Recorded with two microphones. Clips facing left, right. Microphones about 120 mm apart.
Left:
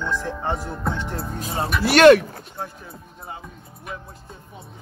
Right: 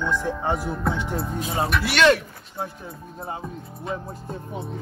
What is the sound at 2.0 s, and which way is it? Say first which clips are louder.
Speech: left 7 dB; 55° left (ahead or behind).